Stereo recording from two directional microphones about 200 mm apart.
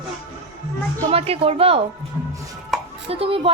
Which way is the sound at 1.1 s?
30° right (ahead or behind).